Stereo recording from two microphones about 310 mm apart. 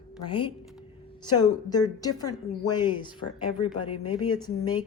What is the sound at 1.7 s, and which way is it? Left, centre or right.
Speech, centre.